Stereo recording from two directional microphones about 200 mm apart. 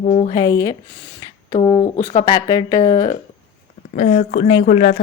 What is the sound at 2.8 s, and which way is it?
Speech, 30° left (ahead or behind).